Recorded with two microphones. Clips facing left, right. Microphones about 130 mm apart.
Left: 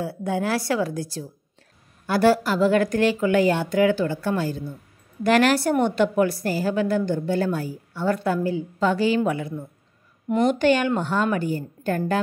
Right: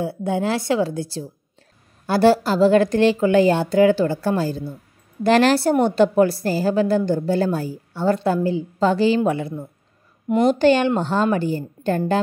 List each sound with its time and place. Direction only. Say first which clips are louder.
0.0 s a woman's voice: right 3 dB; 25° right (ahead or behind)